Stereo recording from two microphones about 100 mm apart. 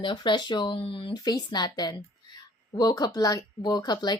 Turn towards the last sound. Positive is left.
turn(degrees=45)  # may be behind; listen again after turning